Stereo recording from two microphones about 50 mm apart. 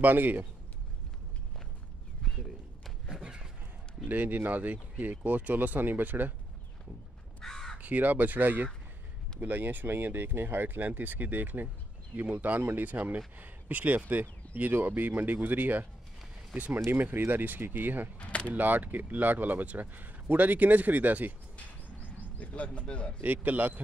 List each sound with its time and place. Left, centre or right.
0.0 s speech: right
3.1 s a sound: centre
4.1 s speech: right
7.4 s crow: centre
7.7 s speech: right
16.9 s speech: right
18.2 s speech: left
18.5 s speech: right
22.4 s speech: left
23.2 s speech: right